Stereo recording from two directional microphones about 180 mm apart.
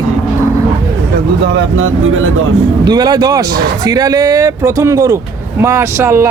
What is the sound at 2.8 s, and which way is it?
Speech, 20° right (ahead or behind).